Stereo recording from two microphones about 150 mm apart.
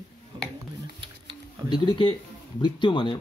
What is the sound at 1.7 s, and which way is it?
Speech, 30° left (ahead or behind).